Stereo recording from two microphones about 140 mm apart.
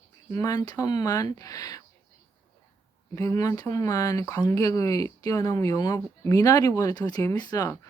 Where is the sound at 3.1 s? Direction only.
20° left (ahead or behind).